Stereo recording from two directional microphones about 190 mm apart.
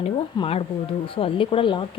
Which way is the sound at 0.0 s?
30° left (ahead or behind).